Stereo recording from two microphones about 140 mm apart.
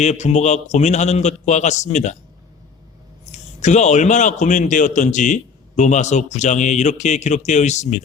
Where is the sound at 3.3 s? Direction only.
55° left (ahead or behind).